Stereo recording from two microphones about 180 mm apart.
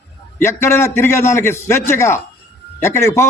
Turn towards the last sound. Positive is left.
turn(degrees=15)  # may be behind; listen again after turning